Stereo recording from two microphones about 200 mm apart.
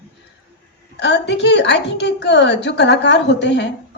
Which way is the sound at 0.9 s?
60° left (ahead or behind).